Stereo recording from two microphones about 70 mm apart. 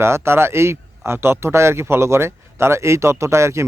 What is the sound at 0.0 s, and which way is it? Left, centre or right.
A man's voice, right.